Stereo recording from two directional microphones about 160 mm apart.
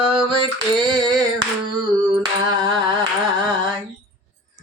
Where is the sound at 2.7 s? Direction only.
30° right (ahead or behind).